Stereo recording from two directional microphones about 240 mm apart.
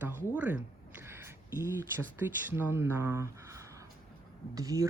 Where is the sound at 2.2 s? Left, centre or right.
Centre.